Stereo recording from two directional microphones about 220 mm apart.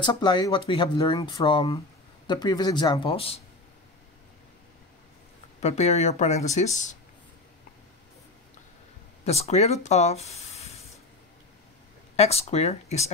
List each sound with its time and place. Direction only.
0.0 s speech: 20° left (ahead or behind)
5.6 s speech: 30° left (ahead or behind)
9.2 s speech: 30° left (ahead or behind)
12.2 s speech: 30° left (ahead or behind)